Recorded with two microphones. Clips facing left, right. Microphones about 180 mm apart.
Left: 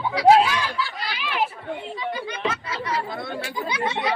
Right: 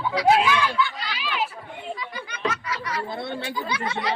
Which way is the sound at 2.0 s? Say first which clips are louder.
Left 4 dB; 25° left (ahead or behind).